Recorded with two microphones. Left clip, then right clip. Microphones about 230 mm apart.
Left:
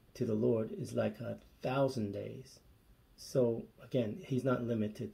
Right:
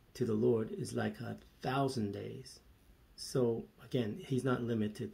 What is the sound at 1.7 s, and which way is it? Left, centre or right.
Speech, right.